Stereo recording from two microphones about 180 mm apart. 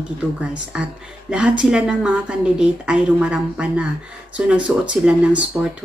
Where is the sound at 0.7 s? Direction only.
5° right (ahead or behind).